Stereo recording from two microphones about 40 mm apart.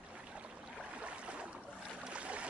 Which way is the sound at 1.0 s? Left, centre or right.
Right.